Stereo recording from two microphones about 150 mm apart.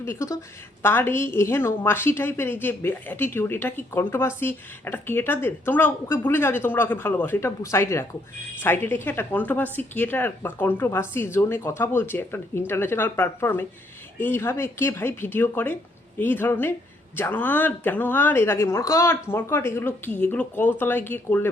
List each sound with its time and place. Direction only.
0.0 s a woman's voice: 20° left (ahead or behind)